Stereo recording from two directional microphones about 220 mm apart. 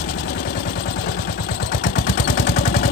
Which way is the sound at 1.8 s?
35° left (ahead or behind).